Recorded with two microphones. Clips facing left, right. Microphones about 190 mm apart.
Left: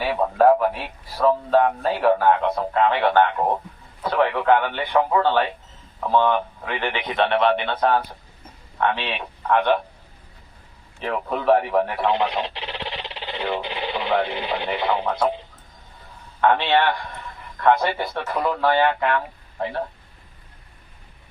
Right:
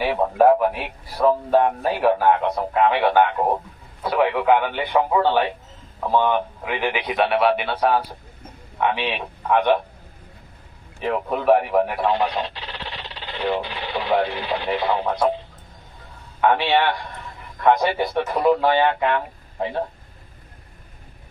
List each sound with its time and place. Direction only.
0.3 s a man's voice: 15° right (ahead or behind)
11.0 s a man's voice: 10° right (ahead or behind)
12.1 s speech: 25° left (ahead or behind)
16.4 s a man's voice: 10° right (ahead or behind)